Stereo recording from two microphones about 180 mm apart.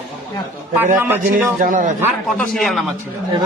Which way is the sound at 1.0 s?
10° right (ahead or behind).